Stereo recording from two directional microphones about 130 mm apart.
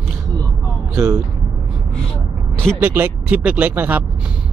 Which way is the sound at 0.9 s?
20° right (ahead or behind).